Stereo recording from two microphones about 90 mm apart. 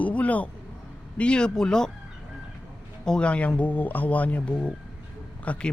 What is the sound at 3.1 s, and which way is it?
Speech, 10° left (ahead or behind).